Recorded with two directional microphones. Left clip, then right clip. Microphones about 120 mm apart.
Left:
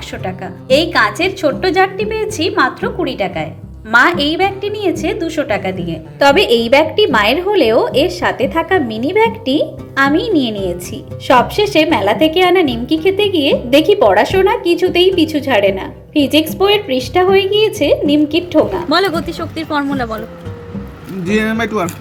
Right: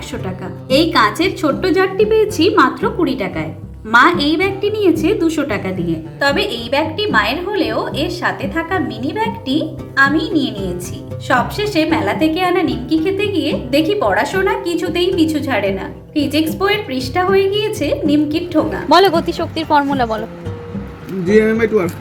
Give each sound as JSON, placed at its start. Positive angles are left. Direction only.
{"t": 0.3, "sound": "a woman's voice", "side_deg": 25}
{"t": 3.9, "sound": "a woman's voice", "side_deg": 35}
{"t": 6.1, "sound": "a woman's voice", "side_deg": 60}
{"t": 16.6, "sound": "a woman's voice", "side_deg": 25}
{"t": 18.9, "sound": "speech", "side_deg": -5}
{"t": 21.4, "sound": "speech", "side_deg": 55}